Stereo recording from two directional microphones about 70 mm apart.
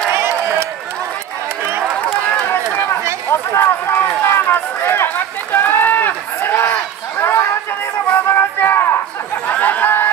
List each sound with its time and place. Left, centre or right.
0.1 s a sound: right
1.6 s run: right
2.5 s run: left
7.2 s chatter: left
8.1 s a sound: left
9.5 s chatter: left